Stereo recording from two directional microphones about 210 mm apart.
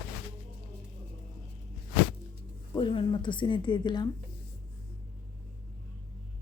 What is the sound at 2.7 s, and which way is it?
Speech, 25° left (ahead or behind).